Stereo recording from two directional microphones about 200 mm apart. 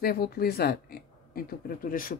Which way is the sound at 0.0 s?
50° left (ahead or behind).